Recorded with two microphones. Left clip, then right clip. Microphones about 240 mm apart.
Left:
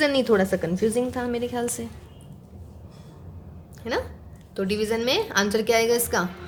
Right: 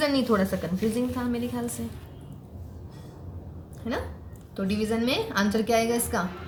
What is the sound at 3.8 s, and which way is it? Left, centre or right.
A woman's voice, left.